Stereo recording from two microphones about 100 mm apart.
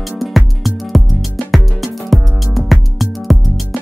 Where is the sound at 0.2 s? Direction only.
Centre (ahead or behind).